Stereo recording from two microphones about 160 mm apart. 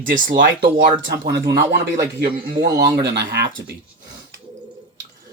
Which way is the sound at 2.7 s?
20° right (ahead or behind).